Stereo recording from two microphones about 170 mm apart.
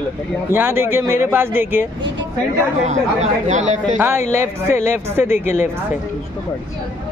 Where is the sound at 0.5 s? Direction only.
15° right (ahead or behind).